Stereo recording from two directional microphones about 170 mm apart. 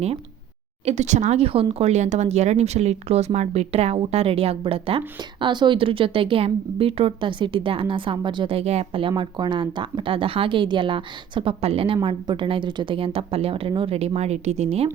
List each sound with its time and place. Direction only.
0.9 s speech: 45° right (ahead or behind)